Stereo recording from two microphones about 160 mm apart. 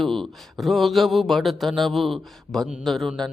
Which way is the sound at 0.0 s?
Centre (ahead or behind).